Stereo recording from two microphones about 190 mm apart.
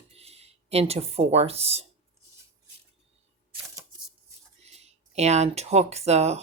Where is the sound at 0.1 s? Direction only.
35° right (ahead or behind).